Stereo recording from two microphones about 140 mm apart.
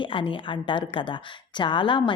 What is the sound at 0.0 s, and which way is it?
A woman's voice, 40° left (ahead or behind).